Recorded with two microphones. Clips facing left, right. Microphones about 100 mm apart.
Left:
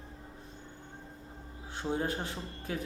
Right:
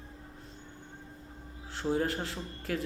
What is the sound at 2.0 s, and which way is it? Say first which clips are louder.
Speech: right 2 dB; 20° left (ahead or behind).